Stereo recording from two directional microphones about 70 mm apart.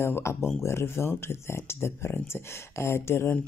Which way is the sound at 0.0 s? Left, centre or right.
Left.